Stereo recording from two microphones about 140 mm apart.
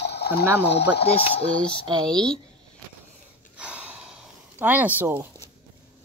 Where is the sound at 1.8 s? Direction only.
30° right (ahead or behind).